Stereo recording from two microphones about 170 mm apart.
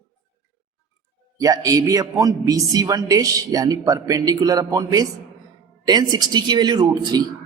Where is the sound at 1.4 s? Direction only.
20° right (ahead or behind).